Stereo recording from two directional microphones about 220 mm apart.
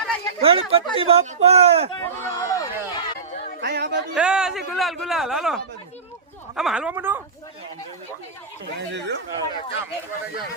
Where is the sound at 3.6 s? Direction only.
50° right (ahead or behind).